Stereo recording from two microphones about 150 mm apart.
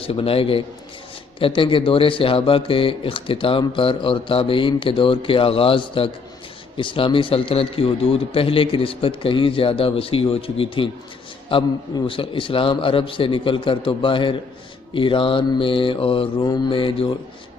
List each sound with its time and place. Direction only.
0.0 s speech: 40° left (ahead or behind)